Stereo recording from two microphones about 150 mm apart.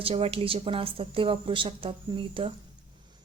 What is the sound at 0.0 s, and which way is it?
A woman's voice, 40° right (ahead or behind).